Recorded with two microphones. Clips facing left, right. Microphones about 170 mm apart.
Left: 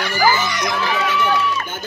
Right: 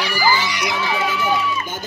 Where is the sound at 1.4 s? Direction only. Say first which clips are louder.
Left 2 dB; 70° left (ahead or behind).